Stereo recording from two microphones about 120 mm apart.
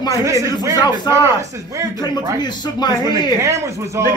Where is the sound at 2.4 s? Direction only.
35° left (ahead or behind).